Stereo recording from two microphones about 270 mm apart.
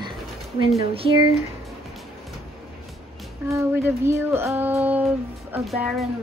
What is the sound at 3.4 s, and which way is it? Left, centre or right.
Child singing, centre.